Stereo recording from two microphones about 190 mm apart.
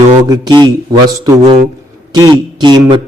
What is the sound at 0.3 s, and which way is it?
Speech, 20° right (ahead or behind).